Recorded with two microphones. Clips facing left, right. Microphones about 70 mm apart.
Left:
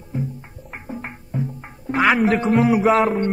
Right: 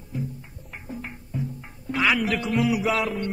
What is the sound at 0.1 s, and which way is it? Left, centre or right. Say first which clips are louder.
Music: left 5 dB; left.